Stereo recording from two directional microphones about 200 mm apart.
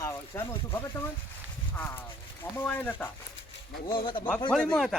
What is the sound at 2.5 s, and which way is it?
Speech, 10° left (ahead or behind).